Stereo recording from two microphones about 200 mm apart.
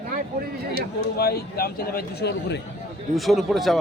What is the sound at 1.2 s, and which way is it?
A man's voice, 50° left (ahead or behind).